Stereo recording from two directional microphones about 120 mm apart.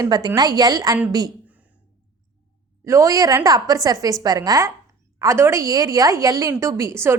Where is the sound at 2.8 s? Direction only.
25° right (ahead or behind).